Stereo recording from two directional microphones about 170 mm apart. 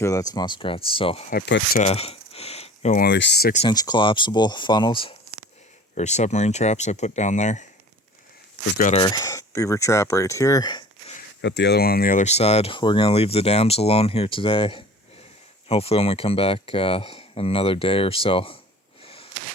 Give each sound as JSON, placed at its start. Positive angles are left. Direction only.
{"t": 0.0, "sound": "speech", "side_deg": 20}
{"t": 1.3, "sound": "speech", "side_deg": 80}
{"t": 1.8, "sound": "a sound", "side_deg": 35}
{"t": 2.9, "sound": "speech", "side_deg": 75}
{"t": 3.7, "sound": "speech", "side_deg": 25}
{"t": 5.9, "sound": "speech", "side_deg": 40}
{"t": 9.0, "sound": "speech", "side_deg": 25}
{"t": 11.4, "sound": "speech", "side_deg": 90}
{"t": 19.0, "sound": "a sound", "side_deg": 35}